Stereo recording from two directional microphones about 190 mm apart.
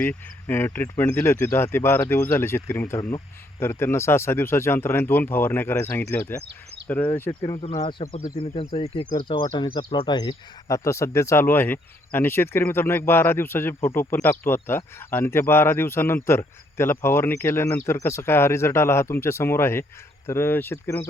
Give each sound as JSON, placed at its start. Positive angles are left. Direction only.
{"t": 0.0, "sound": "speech", "side_deg": 10}
{"t": 7.4, "sound": "speech", "side_deg": 25}